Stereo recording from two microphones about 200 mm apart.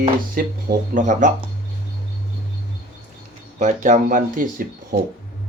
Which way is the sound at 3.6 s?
40° right (ahead or behind).